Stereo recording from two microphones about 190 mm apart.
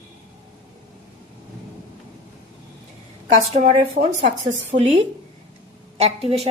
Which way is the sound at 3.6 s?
30° right (ahead or behind).